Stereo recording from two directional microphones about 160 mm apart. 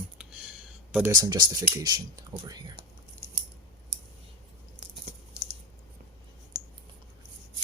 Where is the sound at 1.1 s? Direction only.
25° right (ahead or behind).